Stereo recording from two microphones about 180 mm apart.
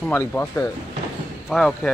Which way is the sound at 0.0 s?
10° left (ahead or behind).